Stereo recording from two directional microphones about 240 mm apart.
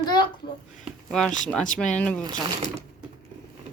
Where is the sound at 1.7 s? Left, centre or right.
Centre.